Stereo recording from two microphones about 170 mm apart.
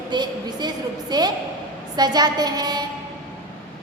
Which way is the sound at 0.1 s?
25° right (ahead or behind).